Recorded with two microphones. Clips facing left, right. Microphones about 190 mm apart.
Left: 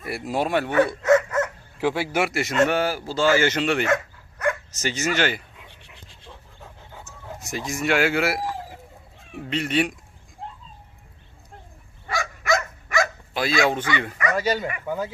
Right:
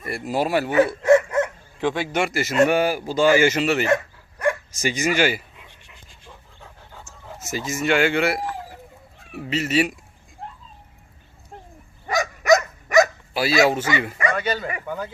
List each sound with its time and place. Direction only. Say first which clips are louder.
0.0 s speech: right 2 dB; centre (ahead or behind)
1.0 s dog: right 3 dB; 25° right (ahead or behind)
1.8 s speech: even; 10° left (ahead or behind)
2.6 s speech: right 3 dB; 10° right (ahead or behind)
3.8 s dog: right 2 dB; 30° right (ahead or behind)
4.7 s speech: right 3 dB; 10° right (ahead or behind)
6.6 s pant: left 1 dB; centre (ahead or behind)
9.3 s speech: right 2 dB; 5° right (ahead or behind)
12.0 s dog: right 7 dB; 20° right (ahead or behind)
12.5 s dog: right 6 dB; 45° right (ahead or behind)
13.3 s speech: right 3 dB; 5° right (ahead or behind)
14.2 s a sound: right 1 dB; 30° right (ahead or behind)
14.8 s speech: left 2 dB; 10° left (ahead or behind)